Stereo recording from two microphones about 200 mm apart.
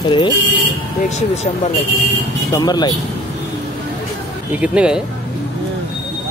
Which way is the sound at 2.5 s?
20° left (ahead or behind).